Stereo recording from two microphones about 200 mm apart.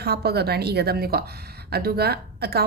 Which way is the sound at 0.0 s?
55° right (ahead or behind).